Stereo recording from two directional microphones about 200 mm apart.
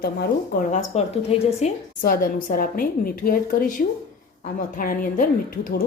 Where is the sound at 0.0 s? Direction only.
45° left (ahead or behind).